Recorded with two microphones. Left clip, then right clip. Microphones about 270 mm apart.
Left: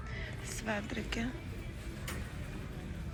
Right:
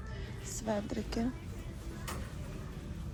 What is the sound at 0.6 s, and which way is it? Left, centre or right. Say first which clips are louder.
Speech: right 2 dB; centre.